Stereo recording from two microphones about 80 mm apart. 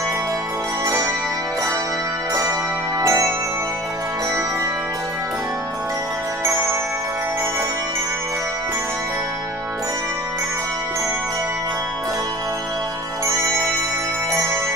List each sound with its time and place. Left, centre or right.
0.8 s music: right
3.0 s music: right